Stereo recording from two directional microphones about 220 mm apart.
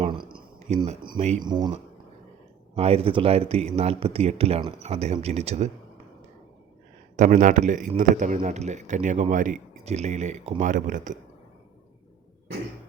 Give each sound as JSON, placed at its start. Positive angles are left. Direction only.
{"t": 0.0, "sound": "a sound", "side_deg": -20}
{"t": 1.5, "sound": "speech", "side_deg": -20}
{"t": 2.7, "sound": "speech", "side_deg": -25}
{"t": 7.2, "sound": "a man's voice", "side_deg": -35}